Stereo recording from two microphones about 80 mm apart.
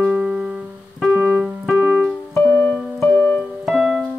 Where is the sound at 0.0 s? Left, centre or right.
Right.